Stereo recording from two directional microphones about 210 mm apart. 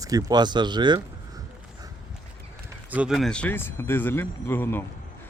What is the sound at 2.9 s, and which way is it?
Speech, 5° right (ahead or behind).